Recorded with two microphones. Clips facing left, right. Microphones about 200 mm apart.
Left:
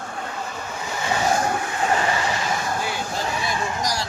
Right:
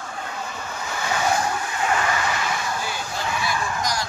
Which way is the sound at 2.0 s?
30° left (ahead or behind).